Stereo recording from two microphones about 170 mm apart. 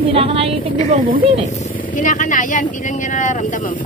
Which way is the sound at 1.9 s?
50° left (ahead or behind).